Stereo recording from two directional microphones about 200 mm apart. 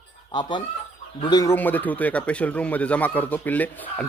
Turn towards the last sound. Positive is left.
turn(degrees=10)  # may be behind; listen again after turning